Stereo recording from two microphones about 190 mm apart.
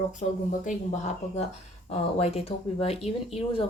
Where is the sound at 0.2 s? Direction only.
40° left (ahead or behind).